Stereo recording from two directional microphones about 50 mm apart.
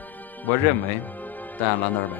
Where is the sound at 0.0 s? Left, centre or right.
Left.